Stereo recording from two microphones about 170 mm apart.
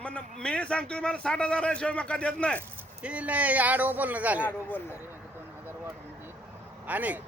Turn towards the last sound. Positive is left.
turn(degrees=-10)  # may be behind; listen again after turning